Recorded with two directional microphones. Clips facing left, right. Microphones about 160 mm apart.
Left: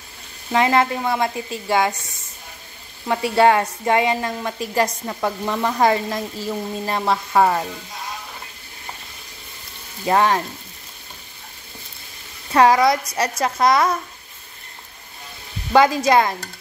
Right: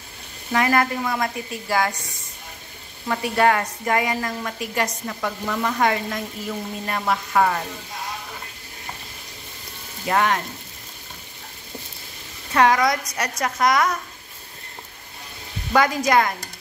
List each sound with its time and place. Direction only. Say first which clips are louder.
0.5 s a woman's voice: left 3 dB; 20° left (ahead or behind)
3.1 s a woman's voice: left 4 dB; 25° left (ahead or behind)
10.0 s a woman's voice: left 4 dB; 30° left (ahead or behind)
12.5 s a woman's voice: left 3 dB; 30° left (ahead or behind)
15.7 s a woman's voice: left 4 dB; 25° left (ahead or behind)